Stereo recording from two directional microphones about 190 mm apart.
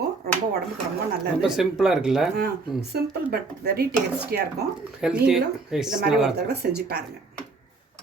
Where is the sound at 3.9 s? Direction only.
5° right (ahead or behind).